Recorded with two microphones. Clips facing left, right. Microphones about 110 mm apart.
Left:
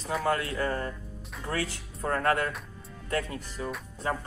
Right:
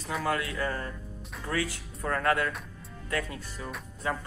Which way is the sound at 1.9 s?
30° left (ahead or behind).